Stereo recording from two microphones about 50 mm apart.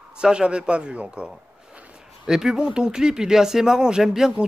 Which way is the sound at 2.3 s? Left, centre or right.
Centre.